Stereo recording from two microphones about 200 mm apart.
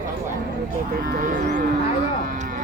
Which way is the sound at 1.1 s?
55° right (ahead or behind).